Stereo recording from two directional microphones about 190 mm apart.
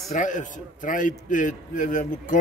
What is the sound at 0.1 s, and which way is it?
A man's voice, 40° left (ahead or behind).